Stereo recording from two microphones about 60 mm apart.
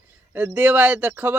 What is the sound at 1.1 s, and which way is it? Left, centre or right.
Speech, right.